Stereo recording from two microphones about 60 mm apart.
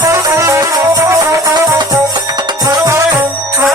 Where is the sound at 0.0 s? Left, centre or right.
Right.